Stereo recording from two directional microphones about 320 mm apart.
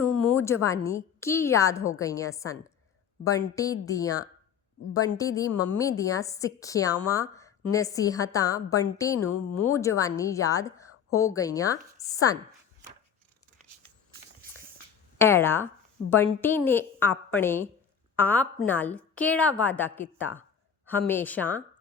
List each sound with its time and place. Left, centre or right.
0.3 s a woman's voice: centre
15.2 s a woman's voice: centre